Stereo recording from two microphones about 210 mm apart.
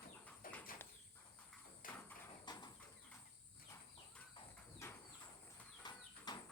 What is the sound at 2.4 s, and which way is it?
Bird, 20° left (ahead or behind).